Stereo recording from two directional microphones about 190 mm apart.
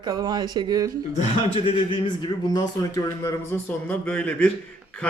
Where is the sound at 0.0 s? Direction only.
20° right (ahead or behind).